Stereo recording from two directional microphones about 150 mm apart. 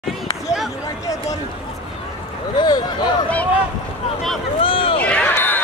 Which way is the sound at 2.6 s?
30° left (ahead or behind).